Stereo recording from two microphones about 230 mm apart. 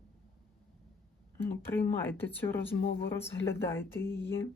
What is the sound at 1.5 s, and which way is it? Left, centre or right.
Speech, centre.